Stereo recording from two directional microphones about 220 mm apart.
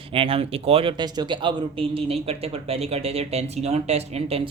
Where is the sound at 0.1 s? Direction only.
25° right (ahead or behind).